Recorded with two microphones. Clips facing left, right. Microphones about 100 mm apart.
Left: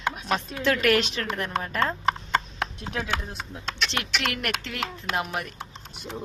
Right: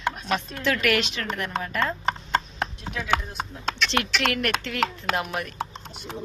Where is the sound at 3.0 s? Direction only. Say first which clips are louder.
Right 5 dB; 55° right (ahead or behind).